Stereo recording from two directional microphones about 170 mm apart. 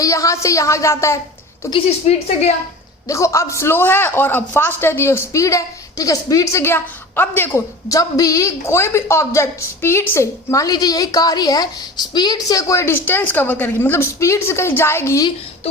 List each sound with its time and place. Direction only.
0.0 s a woman's voice: 20° left (ahead or behind)
1.7 s a woman's voice: 40° left (ahead or behind)
3.1 s a man's voice: 15° left (ahead or behind)